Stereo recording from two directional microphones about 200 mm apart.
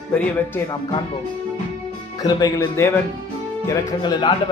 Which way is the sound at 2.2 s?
20° left (ahead or behind).